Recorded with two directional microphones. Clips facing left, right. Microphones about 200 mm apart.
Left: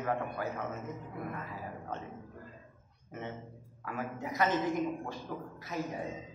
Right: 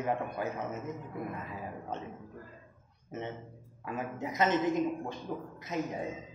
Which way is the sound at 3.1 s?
20° right (ahead or behind).